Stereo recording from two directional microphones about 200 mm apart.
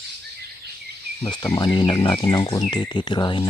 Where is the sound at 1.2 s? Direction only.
20° left (ahead or behind).